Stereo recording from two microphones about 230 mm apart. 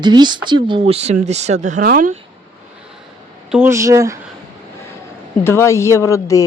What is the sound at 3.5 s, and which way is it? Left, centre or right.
Speech, centre.